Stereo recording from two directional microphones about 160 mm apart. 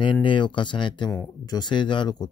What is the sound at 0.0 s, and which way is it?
Speech, 30° left (ahead or behind).